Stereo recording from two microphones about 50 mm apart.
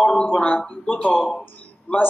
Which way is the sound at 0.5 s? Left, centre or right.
Left.